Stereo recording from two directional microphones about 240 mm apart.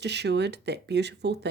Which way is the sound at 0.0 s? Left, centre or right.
Right.